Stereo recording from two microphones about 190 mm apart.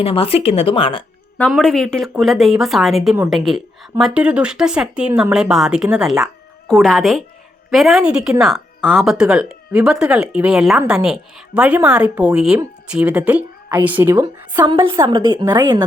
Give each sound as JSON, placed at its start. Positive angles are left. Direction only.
{"t": 0.0, "sound": "speech", "side_deg": 30}
{"t": 1.4, "sound": "a woman's voice", "side_deg": 5}